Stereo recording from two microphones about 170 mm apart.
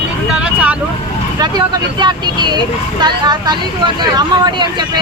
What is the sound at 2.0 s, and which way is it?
Speech, 25° right (ahead or behind).